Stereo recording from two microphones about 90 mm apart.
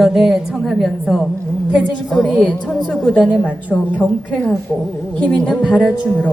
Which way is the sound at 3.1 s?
15° right (ahead or behind).